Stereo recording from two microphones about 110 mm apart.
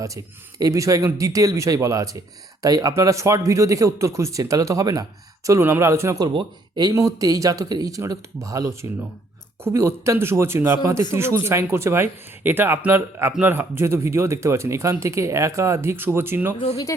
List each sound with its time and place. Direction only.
0.6 s speech: 30° right (ahead or behind)
6.2 s speech: 40° right (ahead or behind); by 16.6 s 20° right (ahead or behind)